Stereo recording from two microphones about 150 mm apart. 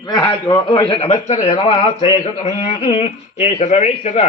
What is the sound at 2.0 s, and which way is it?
Speech, 40° left (ahead or behind).